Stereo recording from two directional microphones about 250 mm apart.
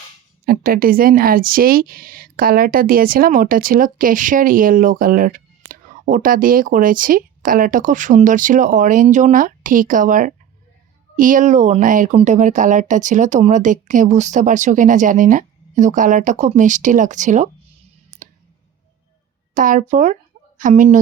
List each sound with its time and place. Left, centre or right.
0.4 s speech: right
19.5 s a woman's voice: right